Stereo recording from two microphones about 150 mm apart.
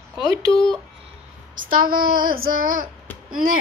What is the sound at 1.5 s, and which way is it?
A woman's voice, 65° right (ahead or behind).